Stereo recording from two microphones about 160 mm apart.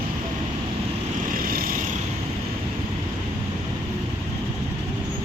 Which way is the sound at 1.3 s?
65° right (ahead or behind).